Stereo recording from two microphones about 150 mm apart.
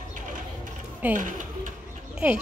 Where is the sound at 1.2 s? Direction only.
60° right (ahead or behind).